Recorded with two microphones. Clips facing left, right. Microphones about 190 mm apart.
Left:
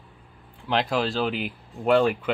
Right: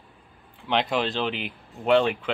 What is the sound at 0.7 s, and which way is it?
Speech, centre (ahead or behind).